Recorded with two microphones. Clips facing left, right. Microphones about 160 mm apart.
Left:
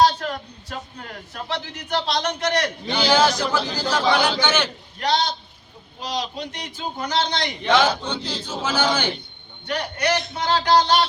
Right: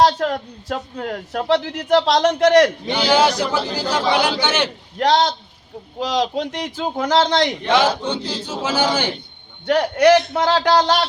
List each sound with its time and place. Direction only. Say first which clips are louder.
0.0 s speech: right 3 dB; 90° right
2.9 s speech: left 2 dB; 10° right (ahead or behind)
4.9 s speech: right 6 dB; 90° right
7.8 s speech: right 4 dB; centre (ahead or behind)
8.6 s speech: right 2 dB; 30° right (ahead or behind)
9.6 s speech: right 10 dB; 90° right